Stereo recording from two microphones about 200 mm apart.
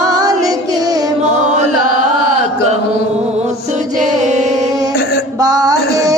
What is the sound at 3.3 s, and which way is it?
Music, 35° right (ahead or behind).